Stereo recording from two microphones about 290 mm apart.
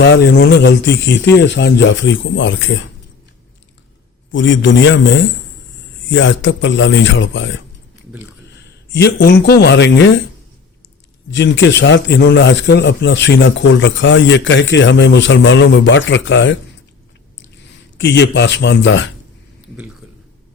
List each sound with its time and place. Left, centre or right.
0.0 s a man's voice: left
4.3 s a man's voice: left
11.3 s a man's voice: left
17.9 s a man's voice: left